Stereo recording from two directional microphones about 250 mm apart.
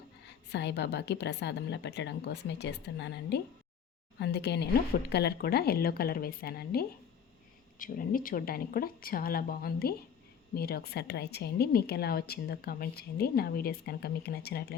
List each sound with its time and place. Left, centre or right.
0.5 s a woman's voice: left